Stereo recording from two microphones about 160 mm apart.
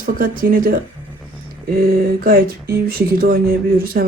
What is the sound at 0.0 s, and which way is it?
Speech, 60° right (ahead or behind).